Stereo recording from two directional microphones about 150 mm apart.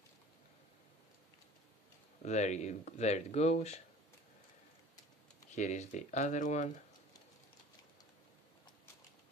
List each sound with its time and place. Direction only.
2.2 s speech: 50° left (ahead or behind)
5.5 s speech: 50° left (ahead or behind)